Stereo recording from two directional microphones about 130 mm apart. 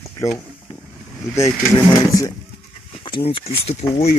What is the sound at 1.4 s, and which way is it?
Speech, 25° left (ahead or behind).